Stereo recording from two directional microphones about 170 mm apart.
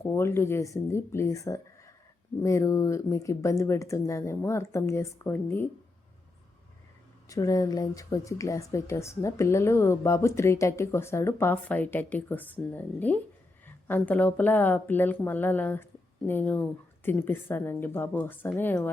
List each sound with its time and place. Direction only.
0.0 s speech: 15° left (ahead or behind)
7.3 s speech: 20° left (ahead or behind)